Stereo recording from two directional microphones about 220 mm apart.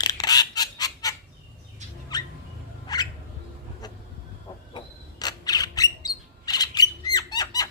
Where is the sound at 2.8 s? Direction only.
20° left (ahead or behind).